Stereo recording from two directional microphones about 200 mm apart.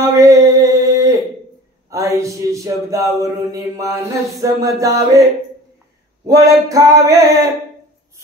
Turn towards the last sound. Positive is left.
turn(degrees=-15)  # may be behind; listen again after turning